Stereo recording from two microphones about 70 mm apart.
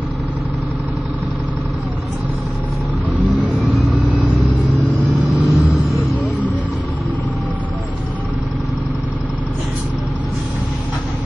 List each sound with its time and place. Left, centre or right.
3.6 s vehicle: centre